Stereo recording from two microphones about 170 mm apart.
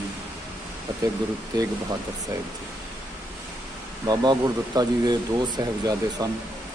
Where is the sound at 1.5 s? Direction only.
25° right (ahead or behind).